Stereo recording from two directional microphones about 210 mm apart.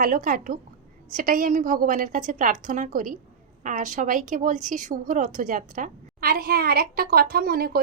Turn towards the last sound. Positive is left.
turn(degrees=-45)  # may be behind; listen again after turning